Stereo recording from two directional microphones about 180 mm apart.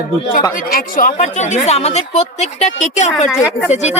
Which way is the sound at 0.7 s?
50° left (ahead or behind).